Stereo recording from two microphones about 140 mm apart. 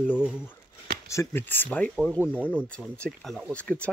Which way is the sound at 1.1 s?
20° left (ahead or behind).